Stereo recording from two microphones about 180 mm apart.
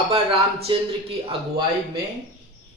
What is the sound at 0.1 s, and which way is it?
Speech, 30° right (ahead or behind).